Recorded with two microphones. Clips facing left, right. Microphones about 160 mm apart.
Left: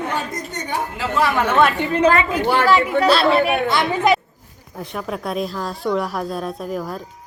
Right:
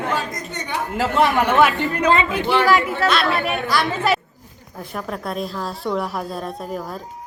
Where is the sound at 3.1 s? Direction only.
30° left (ahead or behind).